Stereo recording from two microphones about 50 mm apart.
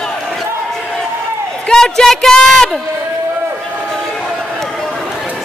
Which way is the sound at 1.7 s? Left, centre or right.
Centre.